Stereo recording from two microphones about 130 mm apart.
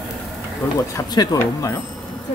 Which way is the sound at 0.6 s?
15° left (ahead or behind).